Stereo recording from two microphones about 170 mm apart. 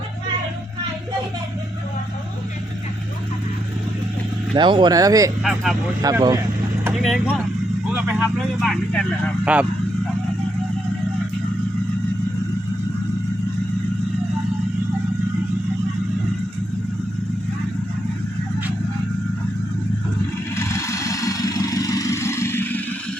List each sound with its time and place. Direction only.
4.5 s speech: 25° right (ahead or behind)
5.4 s speech: centre (ahead or behind)
6.0 s speech: 20° right (ahead or behind)
7.0 s speech: centre (ahead or behind)
8.6 s speech: 5° left (ahead or behind)
9.4 s speech: 5° right (ahead or behind)
20.6 s vehicle: 15° left (ahead or behind)